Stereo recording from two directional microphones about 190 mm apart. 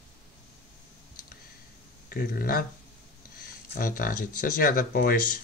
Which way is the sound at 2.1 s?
50° left (ahead or behind).